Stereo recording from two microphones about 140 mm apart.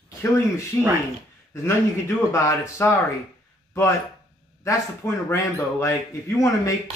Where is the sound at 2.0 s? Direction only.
20° left (ahead or behind).